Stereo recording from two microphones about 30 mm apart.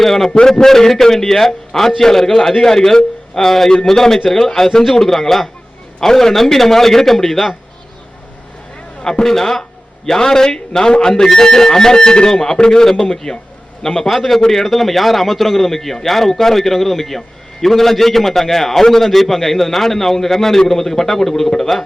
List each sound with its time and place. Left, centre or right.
0.0 s a man's voice: centre
9.2 s a man's voice: centre
12.8 s a man's voice: centre
14.2 s a man's voice: centre